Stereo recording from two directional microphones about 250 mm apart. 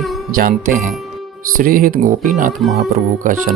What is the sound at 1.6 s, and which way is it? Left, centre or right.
Speech, right.